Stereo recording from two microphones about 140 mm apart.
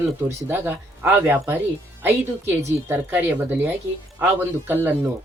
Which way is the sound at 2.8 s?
15° right (ahead or behind).